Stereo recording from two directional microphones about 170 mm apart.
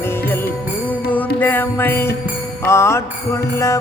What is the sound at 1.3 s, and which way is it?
Music, 10° left (ahead or behind).